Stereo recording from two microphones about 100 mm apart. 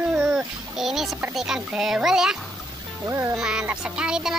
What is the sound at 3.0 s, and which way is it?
Speech, 30° right (ahead or behind).